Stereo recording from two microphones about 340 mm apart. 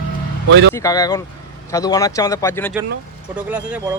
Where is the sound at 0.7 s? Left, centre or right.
Centre.